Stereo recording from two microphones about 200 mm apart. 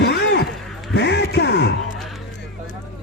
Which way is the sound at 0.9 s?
60° left (ahead or behind).